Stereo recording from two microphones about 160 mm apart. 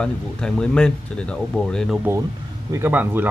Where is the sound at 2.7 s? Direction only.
15° right (ahead or behind).